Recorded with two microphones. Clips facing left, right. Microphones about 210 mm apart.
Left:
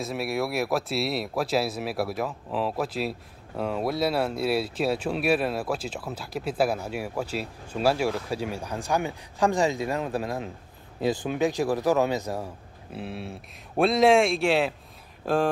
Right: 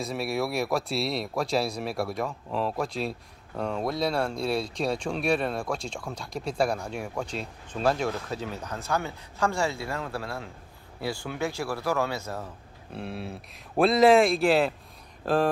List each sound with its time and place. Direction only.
0.0 s a man's voice: centre (ahead or behind)
12.9 s speech: centre (ahead or behind)